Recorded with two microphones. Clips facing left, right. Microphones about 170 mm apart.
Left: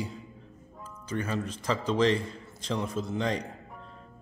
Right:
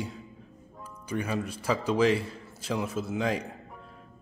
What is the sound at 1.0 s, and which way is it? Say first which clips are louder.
A man's voice: right 1 dB; 10° right (ahead or behind).